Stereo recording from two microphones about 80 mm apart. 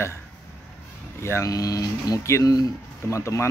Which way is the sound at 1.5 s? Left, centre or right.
Left.